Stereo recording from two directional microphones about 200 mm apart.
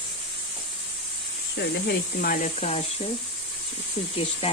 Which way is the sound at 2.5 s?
30° left (ahead or behind).